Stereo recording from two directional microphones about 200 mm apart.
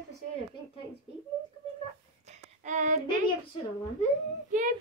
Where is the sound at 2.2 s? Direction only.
35° right (ahead or behind).